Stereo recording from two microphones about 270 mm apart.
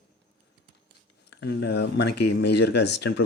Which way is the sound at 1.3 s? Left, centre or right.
Left.